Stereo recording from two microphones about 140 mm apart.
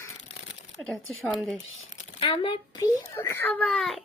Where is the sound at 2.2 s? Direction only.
35° left (ahead or behind).